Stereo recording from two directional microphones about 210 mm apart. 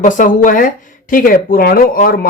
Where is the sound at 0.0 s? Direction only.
40° left (ahead or behind).